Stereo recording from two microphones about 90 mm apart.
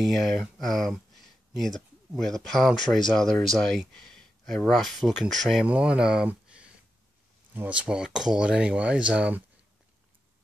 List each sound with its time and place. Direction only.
0.0 s speech: centre (ahead or behind)
5.7 s speech: 10° right (ahead or behind)